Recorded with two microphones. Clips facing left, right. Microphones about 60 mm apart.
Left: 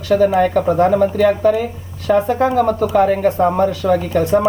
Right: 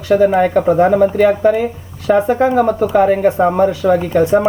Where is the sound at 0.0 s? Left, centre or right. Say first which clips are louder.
Right 2 dB; right.